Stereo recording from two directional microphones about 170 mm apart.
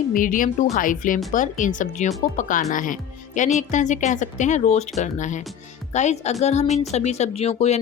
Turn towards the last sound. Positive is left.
turn(degrees=40)  # may be behind; listen again after turning